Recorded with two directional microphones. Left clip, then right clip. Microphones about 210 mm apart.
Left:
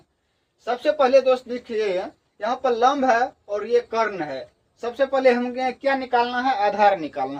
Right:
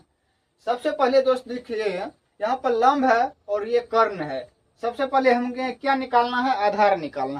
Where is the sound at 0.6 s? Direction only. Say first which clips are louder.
Left 2 dB; 10° right (ahead or behind).